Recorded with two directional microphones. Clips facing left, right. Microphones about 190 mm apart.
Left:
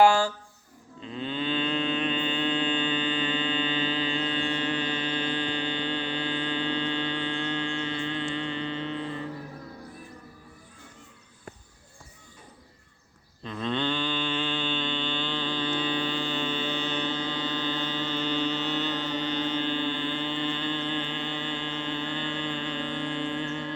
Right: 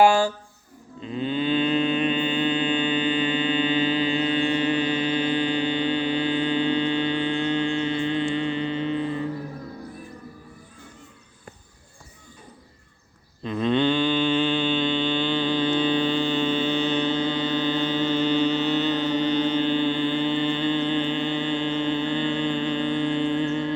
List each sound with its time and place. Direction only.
0.0 s a sound: 10° right (ahead or behind)
1.0 s moo: 10° right (ahead or behind)
13.4 s mantra: 15° right (ahead or behind)